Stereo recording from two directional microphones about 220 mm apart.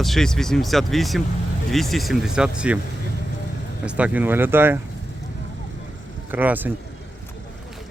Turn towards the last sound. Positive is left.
turn(degrees=-10)  # may be behind; listen again after turning